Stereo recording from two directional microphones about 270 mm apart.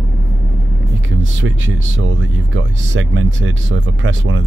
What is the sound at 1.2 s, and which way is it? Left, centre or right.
Speech, right.